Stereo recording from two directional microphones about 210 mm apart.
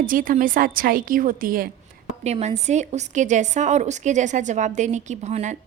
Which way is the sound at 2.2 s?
30° right (ahead or behind).